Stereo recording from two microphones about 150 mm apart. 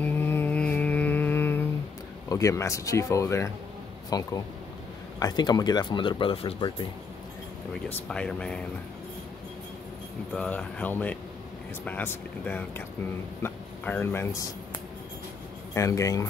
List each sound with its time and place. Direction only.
0.0 s music: 15° left (ahead or behind)
2.2 s speech: 20° left (ahead or behind); by 6.7 s 35° left (ahead or behind)
8.1 s speech: 5° left (ahead or behind)
10.3 s speech: 5° left (ahead or behind)
15.7 s speech: 20° left (ahead or behind)